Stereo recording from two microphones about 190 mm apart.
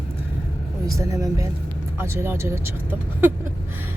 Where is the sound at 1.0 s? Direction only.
15° right (ahead or behind).